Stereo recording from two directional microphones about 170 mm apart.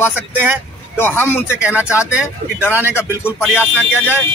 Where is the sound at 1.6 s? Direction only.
10° right (ahead or behind).